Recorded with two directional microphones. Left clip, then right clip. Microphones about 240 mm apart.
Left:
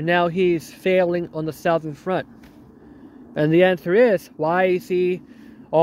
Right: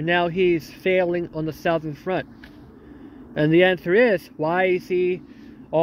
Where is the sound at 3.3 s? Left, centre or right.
Centre.